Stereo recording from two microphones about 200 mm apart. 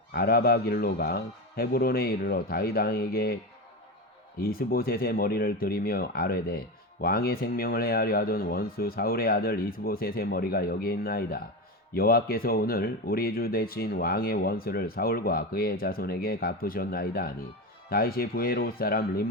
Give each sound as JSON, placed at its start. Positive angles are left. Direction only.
{"t": 0.1, "sound": "speech", "side_deg": 50}
{"t": 4.4, "sound": "speech", "side_deg": 50}